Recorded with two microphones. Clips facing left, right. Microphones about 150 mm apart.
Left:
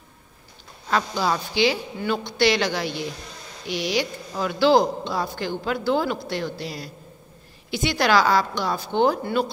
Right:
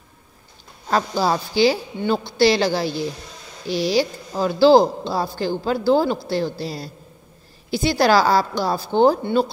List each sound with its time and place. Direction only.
0.8 s a woman's voice: 35° right (ahead or behind)